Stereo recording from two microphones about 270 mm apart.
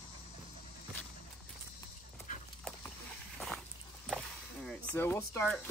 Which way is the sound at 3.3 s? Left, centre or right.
Centre.